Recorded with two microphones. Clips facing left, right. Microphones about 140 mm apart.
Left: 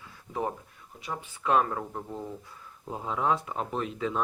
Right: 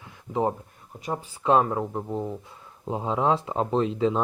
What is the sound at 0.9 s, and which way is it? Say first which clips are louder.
Speech: right 6 dB; 40° right (ahead or behind).